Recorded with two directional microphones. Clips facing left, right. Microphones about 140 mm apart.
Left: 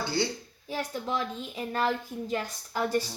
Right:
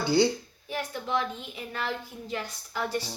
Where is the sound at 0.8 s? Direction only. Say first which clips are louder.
Right 1 dB; 40° left (ahead or behind).